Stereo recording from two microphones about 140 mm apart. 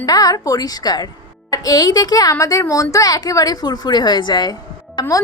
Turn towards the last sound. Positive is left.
turn(degrees=25)  # may be behind; listen again after turning